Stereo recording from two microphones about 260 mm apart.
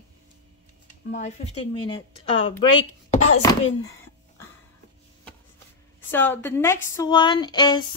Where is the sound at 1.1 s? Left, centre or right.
Left.